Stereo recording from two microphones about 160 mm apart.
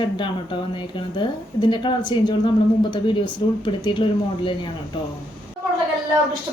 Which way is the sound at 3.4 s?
30° left (ahead or behind).